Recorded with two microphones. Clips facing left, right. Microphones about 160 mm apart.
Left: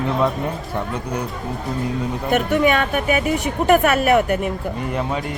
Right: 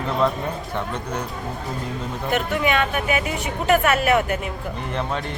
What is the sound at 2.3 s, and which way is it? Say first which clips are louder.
Speech: left 4 dB; 45° left (ahead or behind).